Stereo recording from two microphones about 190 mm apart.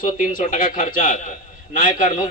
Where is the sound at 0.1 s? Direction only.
45° left (ahead or behind).